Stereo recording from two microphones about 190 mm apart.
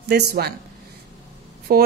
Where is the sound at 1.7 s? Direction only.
50° right (ahead or behind).